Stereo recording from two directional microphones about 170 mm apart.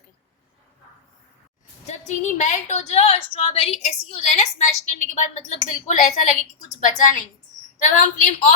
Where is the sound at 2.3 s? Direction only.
45° left (ahead or behind).